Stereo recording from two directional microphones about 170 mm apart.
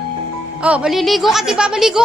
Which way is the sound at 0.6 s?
5° right (ahead or behind).